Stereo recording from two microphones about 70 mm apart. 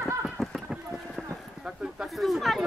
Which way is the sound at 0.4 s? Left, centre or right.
Centre.